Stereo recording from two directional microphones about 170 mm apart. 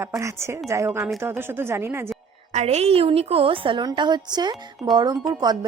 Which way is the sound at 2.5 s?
40° right (ahead or behind).